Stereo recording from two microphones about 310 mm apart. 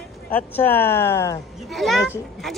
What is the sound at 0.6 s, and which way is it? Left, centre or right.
Speech, centre.